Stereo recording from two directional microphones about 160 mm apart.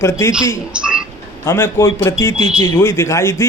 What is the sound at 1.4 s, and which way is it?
Speech, 15° left (ahead or behind).